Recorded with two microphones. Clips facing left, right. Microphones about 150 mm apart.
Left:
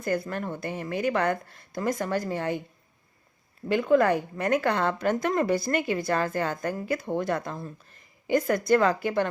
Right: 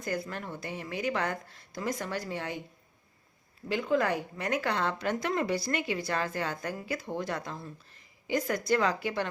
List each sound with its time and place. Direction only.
0.0 s a woman's voice: 55° left (ahead or behind)
3.7 s a woman's voice: 55° left (ahead or behind)